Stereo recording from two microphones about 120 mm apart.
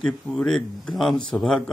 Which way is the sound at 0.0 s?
5° left (ahead or behind).